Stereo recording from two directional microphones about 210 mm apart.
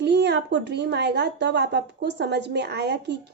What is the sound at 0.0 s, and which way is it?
A woman's voice, 55° right (ahead or behind).